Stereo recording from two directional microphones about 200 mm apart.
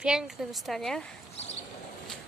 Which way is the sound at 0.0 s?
5° right (ahead or behind).